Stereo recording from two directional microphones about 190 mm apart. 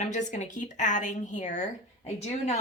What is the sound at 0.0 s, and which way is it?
A woman's voice, 40° left (ahead or behind).